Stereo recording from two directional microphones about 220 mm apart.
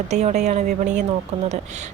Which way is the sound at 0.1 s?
30° right (ahead or behind).